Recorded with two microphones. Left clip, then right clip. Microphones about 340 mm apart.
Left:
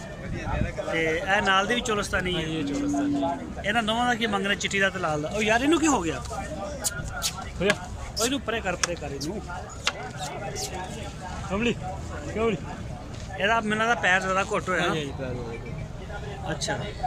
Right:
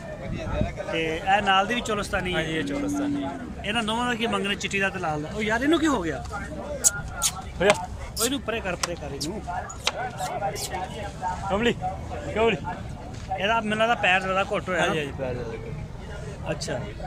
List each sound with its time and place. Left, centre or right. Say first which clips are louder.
0.9 s speech: right 1 dB; centre
2.3 s speech: right 2 dB; right
3.6 s speech: left 1 dB; centre
6.8 s a sound: right 7 dB; right
8.2 s speech: even; centre
10.2 s speech: right 4 dB; right
13.4 s speech: even; centre
16.5 s speech: even; centre